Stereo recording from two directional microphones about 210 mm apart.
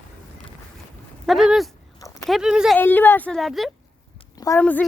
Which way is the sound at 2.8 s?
10° left (ahead or behind).